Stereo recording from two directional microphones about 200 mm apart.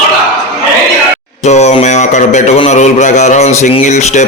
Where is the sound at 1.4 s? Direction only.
35° left (ahead or behind).